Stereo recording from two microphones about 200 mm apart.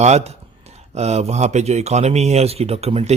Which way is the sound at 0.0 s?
35° right (ahead or behind).